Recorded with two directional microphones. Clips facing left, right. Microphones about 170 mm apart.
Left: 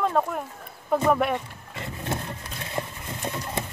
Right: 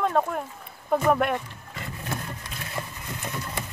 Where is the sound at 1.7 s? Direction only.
25° left (ahead or behind).